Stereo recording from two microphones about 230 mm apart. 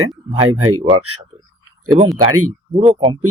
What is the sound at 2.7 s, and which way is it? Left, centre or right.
Speech, right.